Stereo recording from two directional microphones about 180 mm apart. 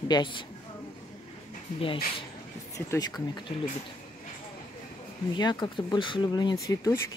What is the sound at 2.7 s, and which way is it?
Speech, 20° left (ahead or behind).